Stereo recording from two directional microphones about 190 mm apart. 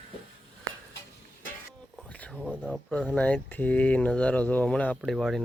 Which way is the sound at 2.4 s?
5° right (ahead or behind).